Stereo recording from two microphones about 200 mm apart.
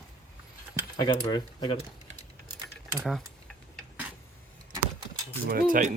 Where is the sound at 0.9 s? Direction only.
20° left (ahead or behind).